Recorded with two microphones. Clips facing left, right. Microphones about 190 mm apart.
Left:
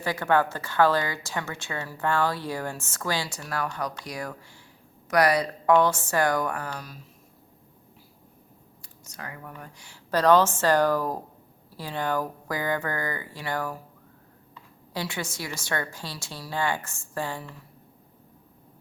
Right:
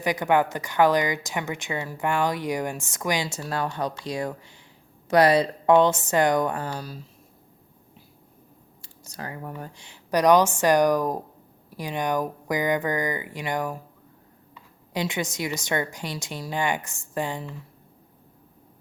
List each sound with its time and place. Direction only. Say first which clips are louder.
0.0 s a woman's voice: right 2 dB; 15° right (ahead or behind)
8.8 s a woman's voice: right 4 dB; 30° right (ahead or behind)